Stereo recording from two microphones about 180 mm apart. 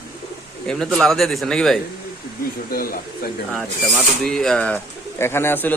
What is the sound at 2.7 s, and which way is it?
Speech, 55° left (ahead or behind).